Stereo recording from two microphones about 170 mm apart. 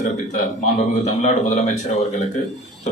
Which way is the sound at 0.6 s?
45° left (ahead or behind).